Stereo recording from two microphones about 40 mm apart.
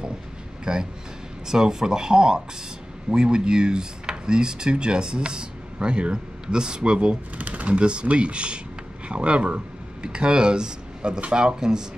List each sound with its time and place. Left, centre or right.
0.7 s speech: right
7.3 s speech: right; by 11.8 s centre